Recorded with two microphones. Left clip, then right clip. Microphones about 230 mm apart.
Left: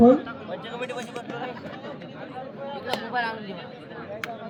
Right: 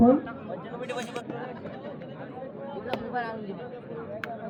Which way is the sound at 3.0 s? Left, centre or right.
Left.